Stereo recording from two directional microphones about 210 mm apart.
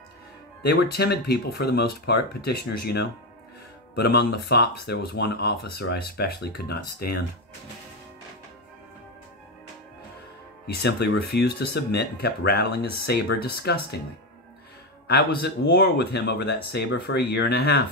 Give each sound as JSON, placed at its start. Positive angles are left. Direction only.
{"t": 0.6, "sound": "speech", "side_deg": 50}
{"t": 10.7, "sound": "speech", "side_deg": 50}
{"t": 15.0, "sound": "speech", "side_deg": 50}